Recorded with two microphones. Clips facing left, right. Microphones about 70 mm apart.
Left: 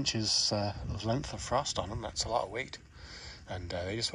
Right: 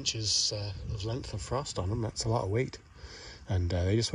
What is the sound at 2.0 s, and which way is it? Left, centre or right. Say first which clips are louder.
Speech: even; left.